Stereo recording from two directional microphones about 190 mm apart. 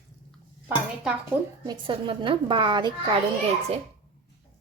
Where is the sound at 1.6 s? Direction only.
25° right (ahead or behind).